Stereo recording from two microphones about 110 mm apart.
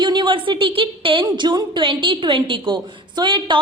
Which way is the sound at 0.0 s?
45° right (ahead or behind).